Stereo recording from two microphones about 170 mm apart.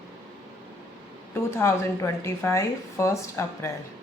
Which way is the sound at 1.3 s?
15° left (ahead or behind).